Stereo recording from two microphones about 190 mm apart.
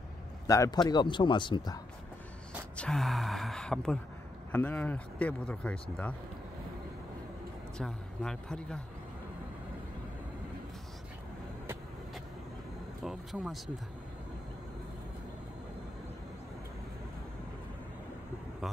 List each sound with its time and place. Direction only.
0.5 s a man's voice: 20° left (ahead or behind)
2.7 s speech: 5° left (ahead or behind)
7.7 s a man's voice: 5° left (ahead or behind)
13.0 s speech: centre (ahead or behind)